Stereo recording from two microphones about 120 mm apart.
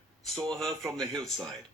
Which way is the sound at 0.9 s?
Centre (ahead or behind).